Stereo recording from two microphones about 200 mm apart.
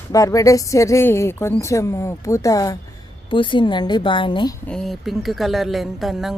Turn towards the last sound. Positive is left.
turn(degrees=0)  # may be behind; listen again after turning